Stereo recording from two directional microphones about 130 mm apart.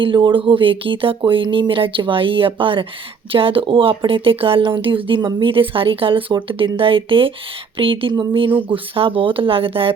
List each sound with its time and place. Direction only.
0.0 s speech: 40° right (ahead or behind)